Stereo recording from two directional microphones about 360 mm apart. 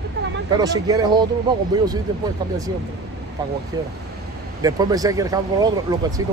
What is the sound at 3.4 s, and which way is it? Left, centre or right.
Speech, centre.